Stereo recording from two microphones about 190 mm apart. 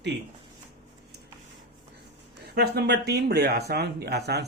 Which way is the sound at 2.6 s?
60° right (ahead or behind).